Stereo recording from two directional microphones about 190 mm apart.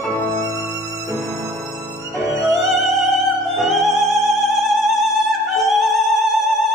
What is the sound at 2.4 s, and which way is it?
Music, centre (ahead or behind).